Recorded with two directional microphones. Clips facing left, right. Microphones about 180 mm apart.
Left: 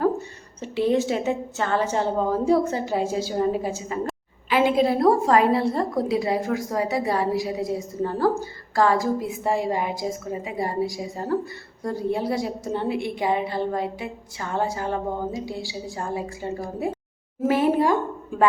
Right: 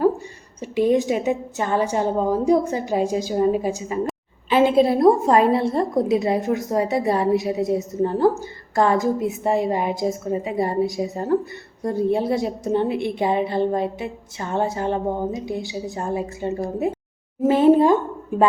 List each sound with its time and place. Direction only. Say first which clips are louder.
0.6 s a woman's voice: right 3 dB; 15° right (ahead or behind)